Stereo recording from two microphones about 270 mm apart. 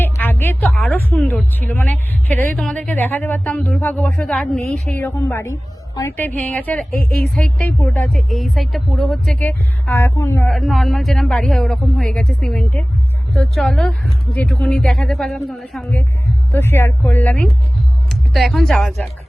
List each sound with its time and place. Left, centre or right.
0.0 s speech: centre
4.9 s speech: centre
6.9 s a woman's voice: left
7.9 s speech: centre